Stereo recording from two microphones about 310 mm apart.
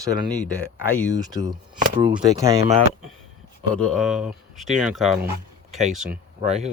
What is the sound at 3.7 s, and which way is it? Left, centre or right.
Speech, centre.